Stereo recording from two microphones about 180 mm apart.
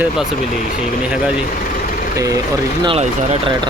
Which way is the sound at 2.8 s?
35° right (ahead or behind).